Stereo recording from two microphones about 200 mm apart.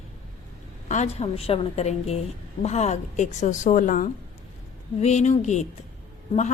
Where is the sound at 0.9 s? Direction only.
35° left (ahead or behind).